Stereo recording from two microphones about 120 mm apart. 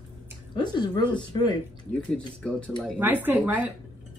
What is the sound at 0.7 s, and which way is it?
Speech, 40° left (ahead or behind).